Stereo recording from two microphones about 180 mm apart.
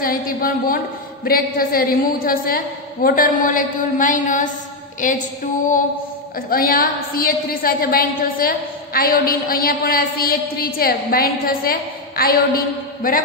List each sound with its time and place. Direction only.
0.0 s a woman's voice: 55° left (ahead or behind)
6.5 s a woman's voice: 55° left (ahead or behind)